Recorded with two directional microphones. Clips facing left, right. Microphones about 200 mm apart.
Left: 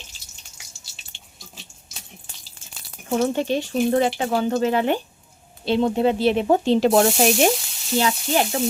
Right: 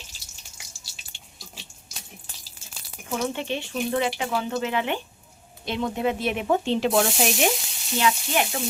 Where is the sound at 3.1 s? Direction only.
40° left (ahead or behind).